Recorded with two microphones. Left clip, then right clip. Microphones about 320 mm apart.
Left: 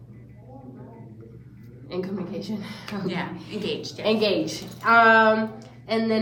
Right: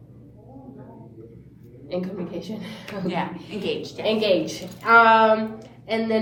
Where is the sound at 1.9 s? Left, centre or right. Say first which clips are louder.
Right 2 dB; centre.